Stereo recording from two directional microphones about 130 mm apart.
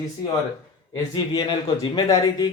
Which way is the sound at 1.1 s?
30° left (ahead or behind).